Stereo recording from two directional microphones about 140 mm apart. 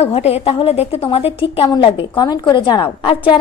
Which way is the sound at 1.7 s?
30° left (ahead or behind).